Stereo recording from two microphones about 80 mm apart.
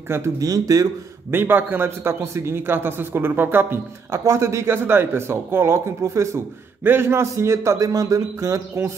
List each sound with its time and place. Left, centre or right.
0.4 s speech: right
1.3 s a man's voice: right
4.3 s a man's voice: right